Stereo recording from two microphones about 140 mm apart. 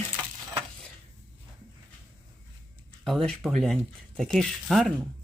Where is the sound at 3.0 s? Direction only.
Centre (ahead or behind).